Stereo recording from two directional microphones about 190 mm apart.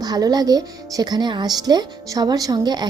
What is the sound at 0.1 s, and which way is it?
Speech, 20° right (ahead or behind).